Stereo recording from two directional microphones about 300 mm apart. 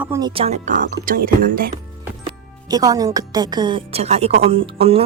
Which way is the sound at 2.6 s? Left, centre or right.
Centre.